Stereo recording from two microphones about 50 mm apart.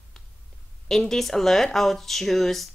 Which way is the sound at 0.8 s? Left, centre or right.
Centre.